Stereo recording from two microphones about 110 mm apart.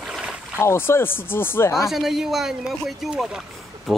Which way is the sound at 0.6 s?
20° left (ahead or behind).